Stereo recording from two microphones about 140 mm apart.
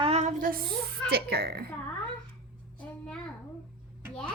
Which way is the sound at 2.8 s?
10° left (ahead or behind).